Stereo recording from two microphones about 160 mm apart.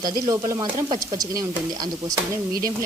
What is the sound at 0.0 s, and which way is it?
Stir, 25° right (ahead or behind).